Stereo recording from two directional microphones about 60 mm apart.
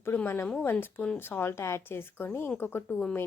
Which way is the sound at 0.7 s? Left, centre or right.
Left.